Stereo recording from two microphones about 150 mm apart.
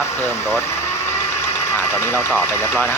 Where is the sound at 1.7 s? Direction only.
15° left (ahead or behind).